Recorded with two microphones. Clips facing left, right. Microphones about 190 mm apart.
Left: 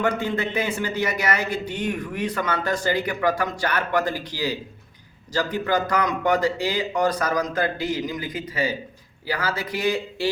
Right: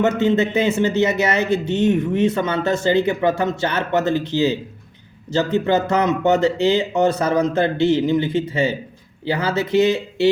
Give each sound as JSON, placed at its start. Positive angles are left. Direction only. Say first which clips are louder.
{"t": 0.0, "sound": "a man's voice", "louder": "right 7 dB", "side_deg": -25}